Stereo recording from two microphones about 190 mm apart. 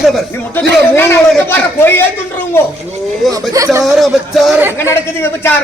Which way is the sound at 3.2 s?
Centre (ahead or behind).